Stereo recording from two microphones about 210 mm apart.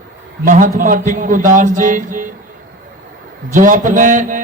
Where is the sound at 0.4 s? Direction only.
40° right (ahead or behind).